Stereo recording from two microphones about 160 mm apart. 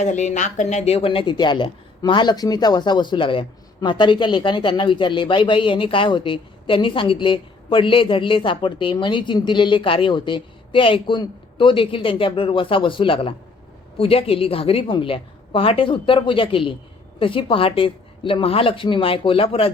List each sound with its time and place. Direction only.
0.0 s speech: 50° left (ahead or behind)